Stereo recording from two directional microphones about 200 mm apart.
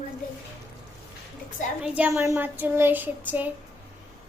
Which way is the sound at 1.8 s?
5° right (ahead or behind).